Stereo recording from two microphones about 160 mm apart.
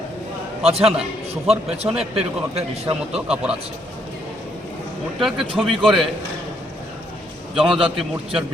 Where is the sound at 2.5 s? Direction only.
40° right (ahead or behind).